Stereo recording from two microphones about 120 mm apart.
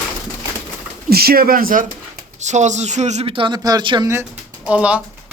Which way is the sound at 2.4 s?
80° right.